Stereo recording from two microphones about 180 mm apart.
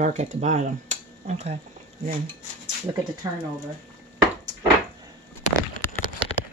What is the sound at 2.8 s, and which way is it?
Speech, 20° right (ahead or behind).